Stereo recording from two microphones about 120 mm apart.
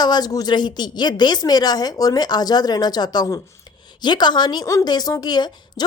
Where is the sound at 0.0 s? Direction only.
35° left (ahead or behind).